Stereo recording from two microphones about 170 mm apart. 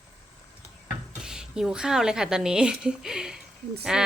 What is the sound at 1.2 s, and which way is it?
A woman's voice, 5° right (ahead or behind).